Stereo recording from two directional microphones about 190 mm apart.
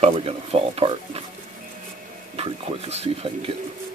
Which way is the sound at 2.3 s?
30° right (ahead or behind).